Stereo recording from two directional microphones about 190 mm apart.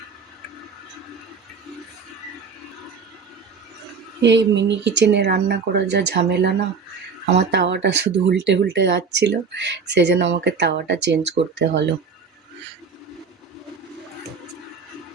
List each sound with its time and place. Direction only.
4.2 s speech: 65° right (ahead or behind)